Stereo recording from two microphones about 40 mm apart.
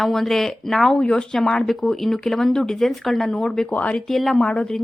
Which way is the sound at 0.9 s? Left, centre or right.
Left.